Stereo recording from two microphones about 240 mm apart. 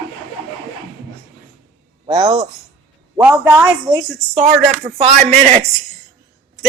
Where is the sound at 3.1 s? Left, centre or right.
Centre.